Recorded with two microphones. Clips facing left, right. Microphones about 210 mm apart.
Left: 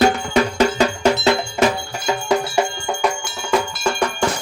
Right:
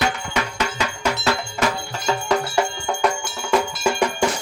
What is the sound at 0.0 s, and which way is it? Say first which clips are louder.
Music: left 8 dB; 35° left (ahead or behind).